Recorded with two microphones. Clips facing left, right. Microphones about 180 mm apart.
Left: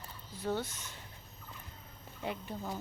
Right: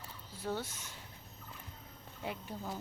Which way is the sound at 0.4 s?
10° right (ahead or behind).